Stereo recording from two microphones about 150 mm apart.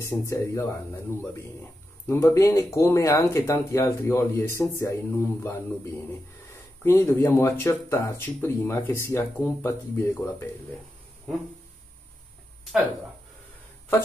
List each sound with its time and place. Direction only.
0.0 s speech: 20° left (ahead or behind)
2.0 s speech: 20° left (ahead or behind)